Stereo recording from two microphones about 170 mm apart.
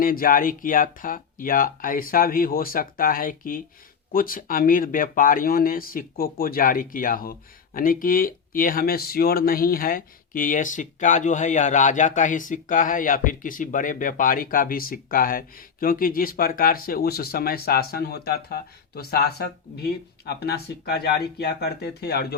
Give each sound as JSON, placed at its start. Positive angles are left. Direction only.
{"t": 0.0, "sound": "speech", "side_deg": 55}